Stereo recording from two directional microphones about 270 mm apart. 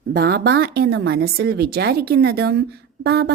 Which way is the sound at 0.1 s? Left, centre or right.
Right.